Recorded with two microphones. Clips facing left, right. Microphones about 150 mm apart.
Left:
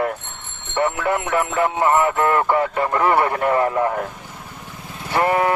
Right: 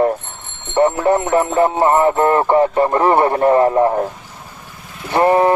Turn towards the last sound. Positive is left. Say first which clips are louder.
# right 5 dB
turn(degrees=-30)  # may be behind; listen again after turning